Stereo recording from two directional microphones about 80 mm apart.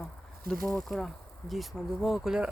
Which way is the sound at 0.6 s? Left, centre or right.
Centre.